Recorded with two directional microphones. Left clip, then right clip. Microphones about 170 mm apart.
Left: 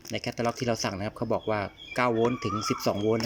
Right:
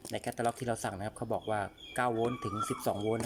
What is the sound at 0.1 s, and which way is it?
Speech, 15° left (ahead or behind).